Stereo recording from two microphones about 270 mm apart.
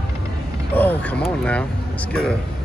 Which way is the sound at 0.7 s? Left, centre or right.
Centre.